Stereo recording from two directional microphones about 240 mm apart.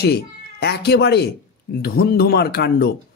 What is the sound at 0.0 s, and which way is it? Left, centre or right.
A man's voice, left.